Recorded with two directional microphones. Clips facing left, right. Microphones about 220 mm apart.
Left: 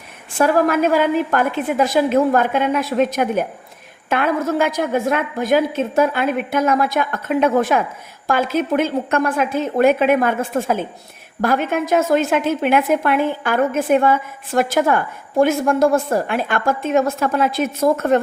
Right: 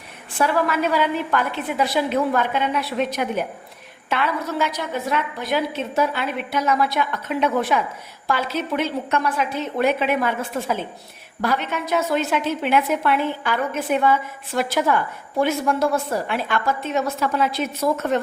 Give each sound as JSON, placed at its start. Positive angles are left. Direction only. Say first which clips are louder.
{"t": 0.3, "sound": "a woman's voice", "louder": "left 5 dB", "side_deg": 45}